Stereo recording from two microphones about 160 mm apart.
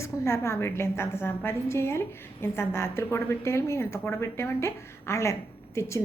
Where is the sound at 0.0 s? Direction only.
15° left (ahead or behind).